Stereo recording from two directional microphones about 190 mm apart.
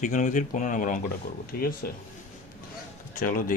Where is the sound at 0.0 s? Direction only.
40° left (ahead or behind).